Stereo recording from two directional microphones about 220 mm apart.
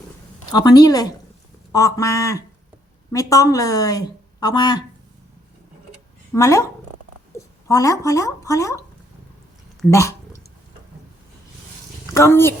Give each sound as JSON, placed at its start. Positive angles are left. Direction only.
{"t": 0.5, "sound": "speech", "side_deg": 20}
{"t": 6.3, "sound": "speech", "side_deg": 15}
{"t": 9.9, "sound": "speech", "side_deg": 15}
{"t": 12.1, "sound": "a woman's voice", "side_deg": 10}